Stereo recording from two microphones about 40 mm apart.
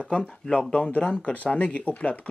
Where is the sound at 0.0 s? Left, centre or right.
Left.